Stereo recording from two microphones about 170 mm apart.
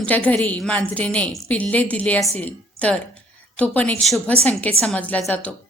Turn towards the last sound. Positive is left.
turn(degrees=10)  # may be behind; listen again after turning